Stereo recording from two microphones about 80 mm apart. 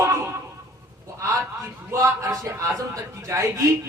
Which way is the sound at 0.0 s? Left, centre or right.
Right.